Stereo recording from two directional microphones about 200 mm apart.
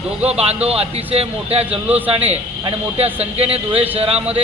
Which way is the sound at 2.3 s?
30° right (ahead or behind).